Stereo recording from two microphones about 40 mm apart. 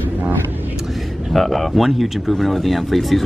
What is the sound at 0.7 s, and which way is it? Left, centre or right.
Vehicle, centre.